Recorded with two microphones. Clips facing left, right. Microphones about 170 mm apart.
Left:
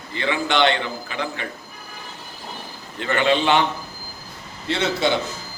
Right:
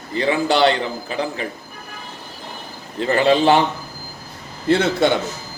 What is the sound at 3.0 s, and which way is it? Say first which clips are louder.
Speech: right 4 dB; 35° right (ahead or behind).